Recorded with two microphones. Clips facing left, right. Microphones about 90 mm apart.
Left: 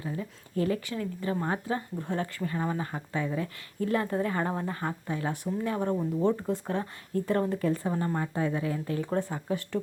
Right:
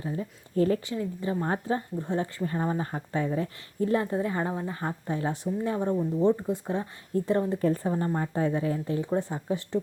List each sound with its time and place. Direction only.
0.0 s speech: 30° right (ahead or behind)
0.9 s speech: 20° right (ahead or behind)
7.6 s speech: 35° right (ahead or behind)
7.9 s speech: 25° right (ahead or behind)